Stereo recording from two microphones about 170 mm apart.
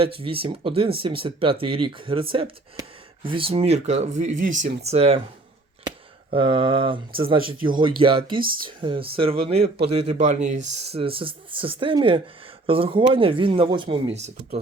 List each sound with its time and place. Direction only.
0.2 s speech: 30° right (ahead or behind)
6.3 s a sound: 30° right (ahead or behind)
7.2 s speech: 30° right (ahead or behind)
10.9 s speech: 35° right (ahead or behind)